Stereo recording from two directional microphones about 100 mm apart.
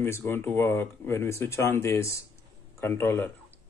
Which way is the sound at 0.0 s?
25° left (ahead or behind).